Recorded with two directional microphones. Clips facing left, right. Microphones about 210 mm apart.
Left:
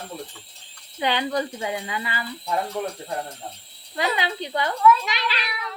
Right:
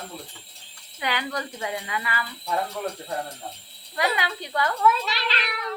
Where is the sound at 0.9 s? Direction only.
25° left (ahead or behind).